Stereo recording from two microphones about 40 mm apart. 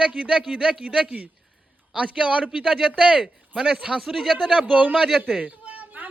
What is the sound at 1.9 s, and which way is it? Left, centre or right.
A man's voice, right.